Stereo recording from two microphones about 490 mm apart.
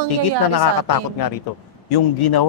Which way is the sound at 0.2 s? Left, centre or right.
Left.